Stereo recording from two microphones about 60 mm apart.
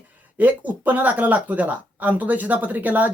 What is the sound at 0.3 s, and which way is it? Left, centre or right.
Speech, right.